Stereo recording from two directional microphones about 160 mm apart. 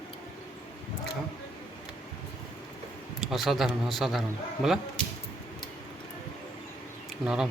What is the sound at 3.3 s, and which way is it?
Speech, centre (ahead or behind).